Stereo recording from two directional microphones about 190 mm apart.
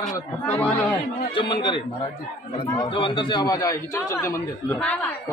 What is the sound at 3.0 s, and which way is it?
Speech, 25° left (ahead or behind).